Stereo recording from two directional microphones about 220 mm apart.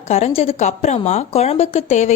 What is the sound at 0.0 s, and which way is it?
A woman's voice, 30° left (ahead or behind).